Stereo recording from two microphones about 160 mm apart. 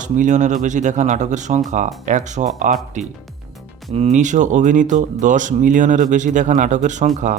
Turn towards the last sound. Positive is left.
turn(degrees=-50)  # may be behind; listen again after turning